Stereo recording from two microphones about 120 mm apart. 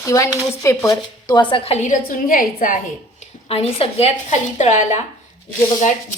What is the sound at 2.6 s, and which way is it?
Speech, 90° left.